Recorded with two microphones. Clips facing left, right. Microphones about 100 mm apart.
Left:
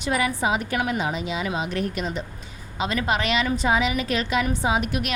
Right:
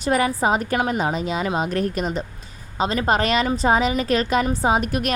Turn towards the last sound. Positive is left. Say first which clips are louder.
# right 4 dB
turn(degrees=-45)  # may be behind; listen again after turning